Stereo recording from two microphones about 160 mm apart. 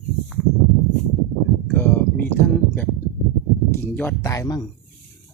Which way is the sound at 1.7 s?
15° left (ahead or behind).